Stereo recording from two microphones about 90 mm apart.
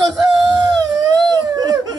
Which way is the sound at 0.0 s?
45° right (ahead or behind).